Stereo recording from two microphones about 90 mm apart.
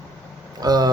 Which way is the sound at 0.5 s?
45° right (ahead or behind).